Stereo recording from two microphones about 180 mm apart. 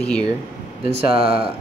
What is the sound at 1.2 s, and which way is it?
Speech, 5° right (ahead or behind).